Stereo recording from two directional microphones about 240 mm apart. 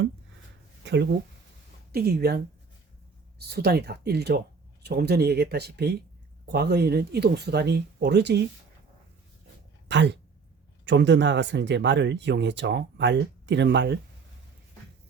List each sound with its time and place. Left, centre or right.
1.9 s speech: right
9.9 s speech: right